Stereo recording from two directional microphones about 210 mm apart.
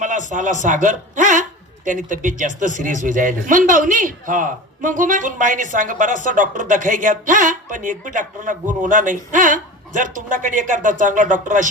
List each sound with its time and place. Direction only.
0.0 s a man's voice: 35° right (ahead or behind)